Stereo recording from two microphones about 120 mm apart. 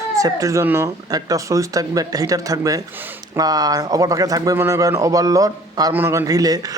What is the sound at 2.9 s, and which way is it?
Speech, 15° right (ahead or behind).